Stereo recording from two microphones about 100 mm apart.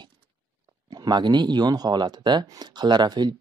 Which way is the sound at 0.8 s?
45° right (ahead or behind).